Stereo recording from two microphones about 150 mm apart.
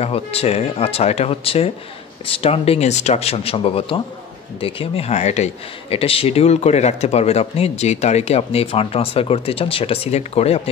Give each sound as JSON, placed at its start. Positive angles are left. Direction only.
{"t": 0.0, "sound": "a man's voice", "side_deg": 40}